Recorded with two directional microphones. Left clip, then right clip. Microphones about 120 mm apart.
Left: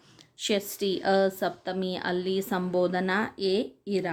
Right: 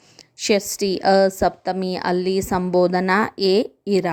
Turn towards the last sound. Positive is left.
turn(degrees=-90)